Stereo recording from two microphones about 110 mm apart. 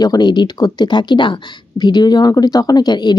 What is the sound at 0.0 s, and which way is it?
Speech, 40° left (ahead or behind).